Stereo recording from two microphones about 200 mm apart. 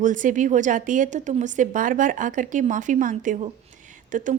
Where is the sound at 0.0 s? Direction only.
40° right (ahead or behind).